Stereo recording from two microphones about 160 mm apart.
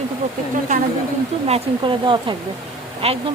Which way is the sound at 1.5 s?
30° right (ahead or behind).